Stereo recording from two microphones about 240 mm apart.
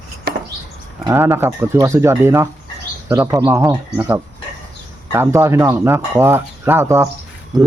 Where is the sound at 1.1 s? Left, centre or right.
Centre.